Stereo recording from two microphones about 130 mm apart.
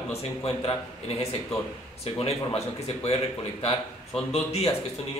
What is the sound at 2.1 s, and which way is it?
A man's voice, 50° left (ahead or behind).